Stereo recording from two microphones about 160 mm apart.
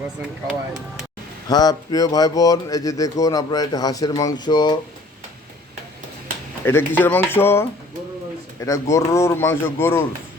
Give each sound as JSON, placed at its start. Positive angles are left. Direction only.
{"t": 1.5, "sound": "speech", "side_deg": 25}
{"t": 6.7, "sound": "speech", "side_deg": 15}